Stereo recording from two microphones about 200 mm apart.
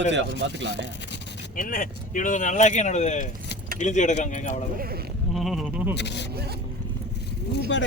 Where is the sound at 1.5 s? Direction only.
45° left (ahead or behind).